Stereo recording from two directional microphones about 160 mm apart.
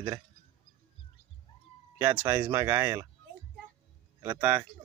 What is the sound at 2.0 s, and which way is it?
Speech, 15° right (ahead or behind).